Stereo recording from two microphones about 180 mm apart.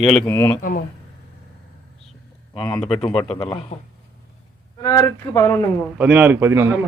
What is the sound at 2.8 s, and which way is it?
Speech, 35° left (ahead or behind).